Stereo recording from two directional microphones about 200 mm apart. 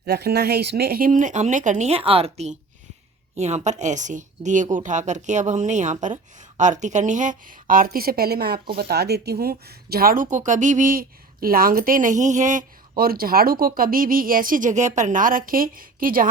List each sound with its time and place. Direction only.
0.0 s a woman's voice: 55° right (ahead or behind)